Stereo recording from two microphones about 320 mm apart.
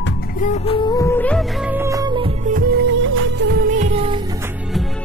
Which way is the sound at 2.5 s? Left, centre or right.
Right.